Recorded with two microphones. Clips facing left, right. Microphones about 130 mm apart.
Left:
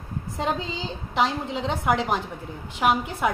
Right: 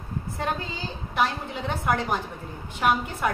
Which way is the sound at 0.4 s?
20° left (ahead or behind).